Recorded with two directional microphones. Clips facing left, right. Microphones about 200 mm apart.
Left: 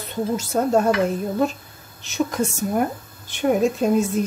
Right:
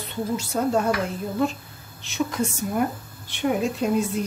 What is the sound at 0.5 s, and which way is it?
Speech, 40° left (ahead or behind).